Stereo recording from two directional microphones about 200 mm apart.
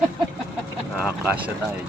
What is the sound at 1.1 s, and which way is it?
Speech, 5° right (ahead or behind).